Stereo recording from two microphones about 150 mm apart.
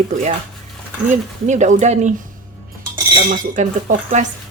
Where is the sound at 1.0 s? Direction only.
55° right (ahead or behind).